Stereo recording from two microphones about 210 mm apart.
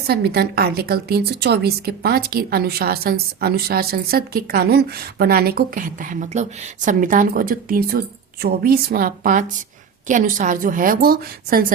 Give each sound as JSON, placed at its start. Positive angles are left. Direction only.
{"t": 0.1, "sound": "a woman's voice", "side_deg": -50}